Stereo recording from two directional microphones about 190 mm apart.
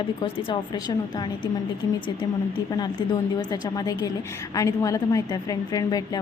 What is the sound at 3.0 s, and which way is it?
A woman's voice, 25° left (ahead or behind).